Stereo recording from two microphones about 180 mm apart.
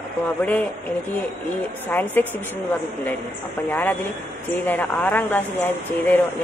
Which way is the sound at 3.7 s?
10° left (ahead or behind).